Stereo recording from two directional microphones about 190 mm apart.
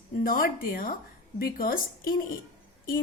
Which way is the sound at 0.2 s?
50° left (ahead or behind).